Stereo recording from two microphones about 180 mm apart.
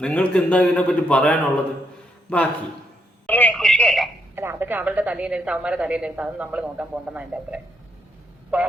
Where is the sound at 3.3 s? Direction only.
10° left (ahead or behind).